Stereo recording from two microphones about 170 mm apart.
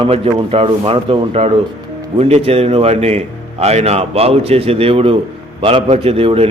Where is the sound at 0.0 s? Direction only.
30° right (ahead or behind).